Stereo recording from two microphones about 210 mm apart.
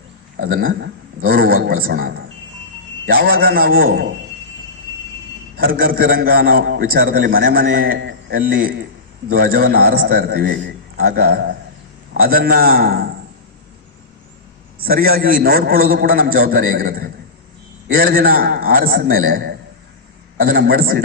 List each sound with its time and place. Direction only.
0.3 s a man's voice: 40° right (ahead or behind)
5.5 s a man's voice: 45° right (ahead or behind)
14.8 s a man's voice: 45° right (ahead or behind)